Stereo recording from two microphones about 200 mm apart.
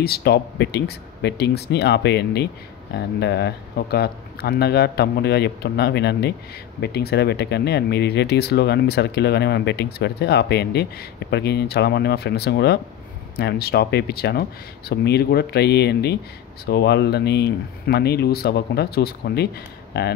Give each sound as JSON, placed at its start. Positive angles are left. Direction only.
{"t": 0.0, "sound": "speech", "side_deg": 50}